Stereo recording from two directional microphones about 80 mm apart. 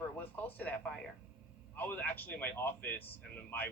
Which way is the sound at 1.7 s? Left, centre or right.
Left.